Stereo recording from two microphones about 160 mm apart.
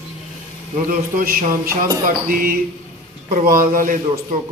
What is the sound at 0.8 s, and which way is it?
Speech, 60° right (ahead or behind).